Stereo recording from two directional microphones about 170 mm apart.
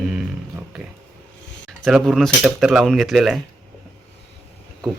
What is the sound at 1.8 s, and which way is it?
Speech, centre (ahead or behind).